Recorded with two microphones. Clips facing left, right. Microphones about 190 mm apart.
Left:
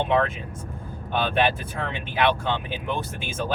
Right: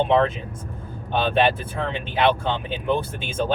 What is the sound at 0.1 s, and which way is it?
Speech, 30° right (ahead or behind).